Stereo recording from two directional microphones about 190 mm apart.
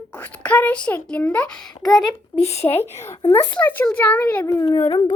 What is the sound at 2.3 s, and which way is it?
Speech, 35° left (ahead or behind).